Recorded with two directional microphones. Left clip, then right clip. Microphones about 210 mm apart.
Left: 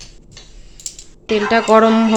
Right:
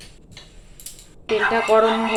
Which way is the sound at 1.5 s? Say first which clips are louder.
Left 6 dB; 45° left (ahead or behind).